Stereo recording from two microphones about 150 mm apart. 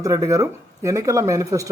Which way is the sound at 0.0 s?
20° right (ahead or behind).